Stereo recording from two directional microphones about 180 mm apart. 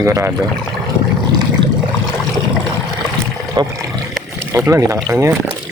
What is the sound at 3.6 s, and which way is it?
Speech, 20° right (ahead or behind).